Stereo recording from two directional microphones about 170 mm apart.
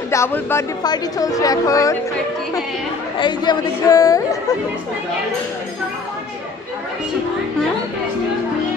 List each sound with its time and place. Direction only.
0.1 s speech: 15° left (ahead or behind)
3.2 s speech: 25° left (ahead or behind)